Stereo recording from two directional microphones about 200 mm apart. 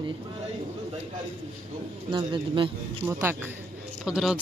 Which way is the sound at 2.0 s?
25° right (ahead or behind).